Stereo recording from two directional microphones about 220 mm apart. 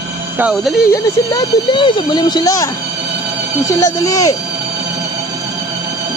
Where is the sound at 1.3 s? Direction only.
20° left (ahead or behind).